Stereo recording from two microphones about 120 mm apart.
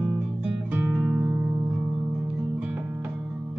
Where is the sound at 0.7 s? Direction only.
15° right (ahead or behind).